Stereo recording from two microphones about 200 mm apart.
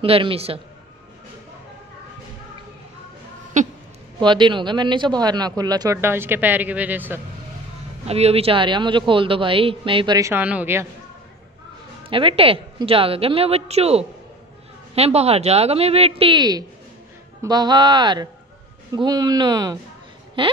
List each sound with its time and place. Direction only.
0.0 s speech: 30° right (ahead or behind)
3.6 s a sound: 40° right (ahead or behind)
4.2 s speech: 25° right (ahead or behind)
8.1 s speech: 30° right (ahead or behind); by 10.9 s 10° right (ahead or behind)
12.1 s speech: 25° right (ahead or behind)